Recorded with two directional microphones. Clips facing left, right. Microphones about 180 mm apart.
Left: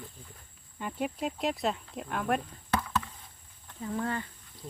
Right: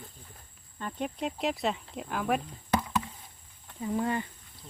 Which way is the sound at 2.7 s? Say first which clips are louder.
Right 2 dB; 15° right (ahead or behind).